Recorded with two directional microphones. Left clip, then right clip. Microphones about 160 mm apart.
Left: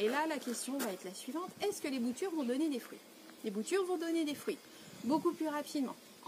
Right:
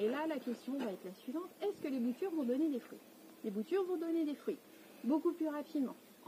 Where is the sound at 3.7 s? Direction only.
15° left (ahead or behind).